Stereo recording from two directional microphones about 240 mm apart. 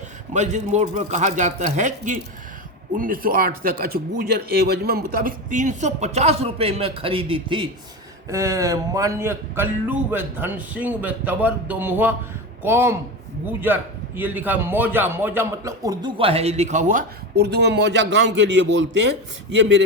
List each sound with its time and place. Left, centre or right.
0.3 s speech: right